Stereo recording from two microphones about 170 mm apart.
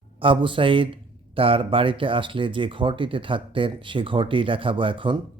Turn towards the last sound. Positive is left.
turn(degrees=-30)  # may be behind; listen again after turning